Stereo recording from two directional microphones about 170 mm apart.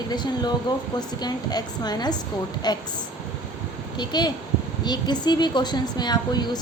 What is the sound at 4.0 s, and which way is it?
A woman's voice, 25° left (ahead or behind).